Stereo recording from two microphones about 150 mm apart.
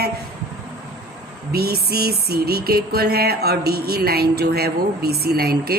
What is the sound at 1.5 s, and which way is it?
A woman's voice, 90° right.